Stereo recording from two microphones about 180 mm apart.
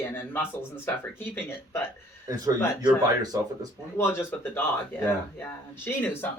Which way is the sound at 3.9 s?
15° left (ahead or behind).